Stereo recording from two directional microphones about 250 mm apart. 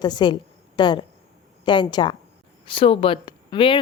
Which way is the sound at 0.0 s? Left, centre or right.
Centre.